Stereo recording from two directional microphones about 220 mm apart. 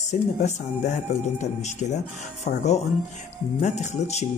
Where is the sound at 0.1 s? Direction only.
35° left (ahead or behind).